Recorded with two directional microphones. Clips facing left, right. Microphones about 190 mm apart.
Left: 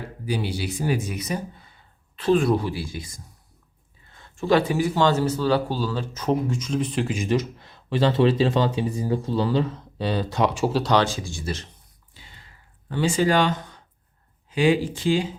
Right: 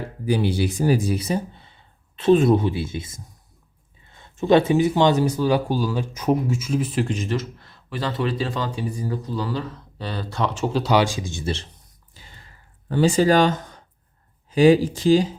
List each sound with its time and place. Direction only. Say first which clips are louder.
0.3 s speech: right 6 dB; 50° right (ahead or behind); by 7.1 s 5° right (ahead or behind)
7.1 s speech: left 2 dB; 15° left (ahead or behind); by 11.6 s 25° right (ahead or behind)
12.1 s a sound: right 2 dB; 40° right (ahead or behind)
12.9 s speech: right 4 dB; 40° right (ahead or behind)